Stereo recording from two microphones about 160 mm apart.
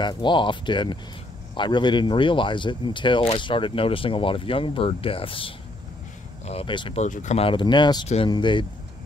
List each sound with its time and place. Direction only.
0.0 s speech: 30° left (ahead or behind)
7.0 s speech: 50° left (ahead or behind); by 8.6 s 30° left (ahead or behind)